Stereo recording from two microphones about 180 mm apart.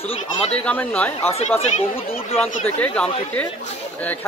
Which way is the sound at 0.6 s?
10° left (ahead or behind).